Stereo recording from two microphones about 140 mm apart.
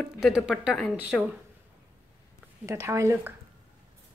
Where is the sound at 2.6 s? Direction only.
20° right (ahead or behind).